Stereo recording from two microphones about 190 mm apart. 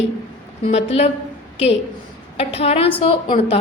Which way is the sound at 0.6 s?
35° left (ahead or behind).